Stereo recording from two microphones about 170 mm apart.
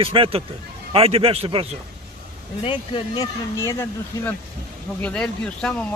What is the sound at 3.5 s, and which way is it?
Speech, 15° left (ahead or behind).